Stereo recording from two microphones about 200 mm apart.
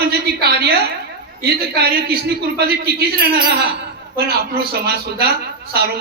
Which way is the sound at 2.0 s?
50° right (ahead or behind).